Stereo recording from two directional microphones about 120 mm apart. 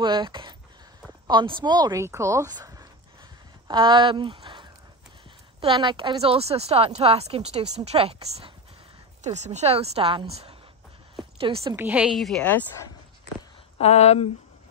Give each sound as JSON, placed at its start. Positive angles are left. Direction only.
{"t": 0.0, "sound": "a woman's voice", "side_deg": -40}
{"t": 2.5, "sound": "a sound", "side_deg": -30}
{"t": 3.6, "sound": "speech", "side_deg": -40}
{"t": 9.2, "sound": "a woman's voice", "side_deg": -75}
{"t": 11.6, "sound": "a woman's voice", "side_deg": -20}
{"t": 12.2, "sound": "speech", "side_deg": 5}
{"t": 13.7, "sound": "speech", "side_deg": 60}